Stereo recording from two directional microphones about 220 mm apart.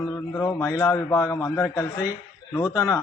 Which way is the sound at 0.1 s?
15° left (ahead or behind).